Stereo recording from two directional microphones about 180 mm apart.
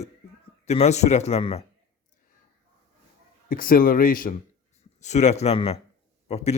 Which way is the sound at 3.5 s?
50° left (ahead or behind).